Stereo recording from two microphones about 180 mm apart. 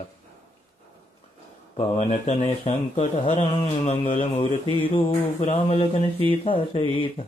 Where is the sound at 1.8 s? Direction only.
40° left (ahead or behind).